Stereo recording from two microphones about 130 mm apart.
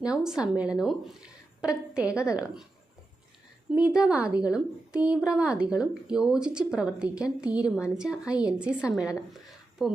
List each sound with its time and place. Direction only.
0.0 s a woman's voice: 5° right (ahead or behind)
3.7 s a woman's voice: 10° right (ahead or behind)